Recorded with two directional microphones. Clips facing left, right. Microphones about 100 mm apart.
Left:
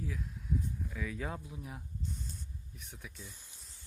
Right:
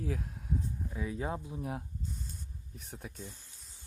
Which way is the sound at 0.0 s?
60° right (ahead or behind).